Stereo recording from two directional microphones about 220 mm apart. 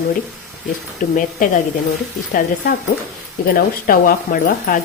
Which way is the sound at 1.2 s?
35° left (ahead or behind).